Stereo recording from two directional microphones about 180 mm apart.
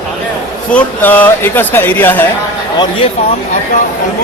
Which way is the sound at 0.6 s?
10° left (ahead or behind).